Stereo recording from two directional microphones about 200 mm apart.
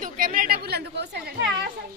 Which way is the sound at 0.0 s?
45° right (ahead or behind).